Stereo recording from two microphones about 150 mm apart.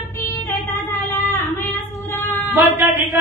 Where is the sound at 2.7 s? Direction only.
10° right (ahead or behind).